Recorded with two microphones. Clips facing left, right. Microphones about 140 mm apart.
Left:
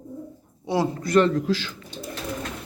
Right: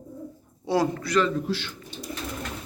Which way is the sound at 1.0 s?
50° left (ahead or behind).